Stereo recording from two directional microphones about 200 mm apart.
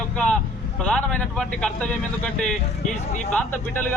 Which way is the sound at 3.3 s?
10° left (ahead or behind).